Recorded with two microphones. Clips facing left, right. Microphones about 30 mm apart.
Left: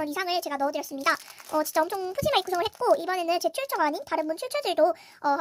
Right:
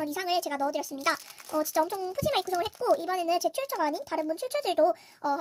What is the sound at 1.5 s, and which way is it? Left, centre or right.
A child's voice, left.